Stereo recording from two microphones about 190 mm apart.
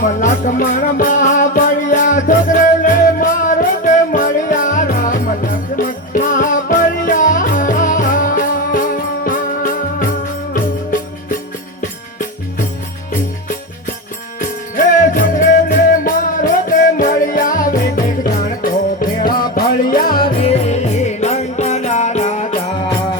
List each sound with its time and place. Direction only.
0.0 s music: 40° left (ahead or behind)
14.3 s music: 45° left (ahead or behind)
20.4 s music: 35° left (ahead or behind)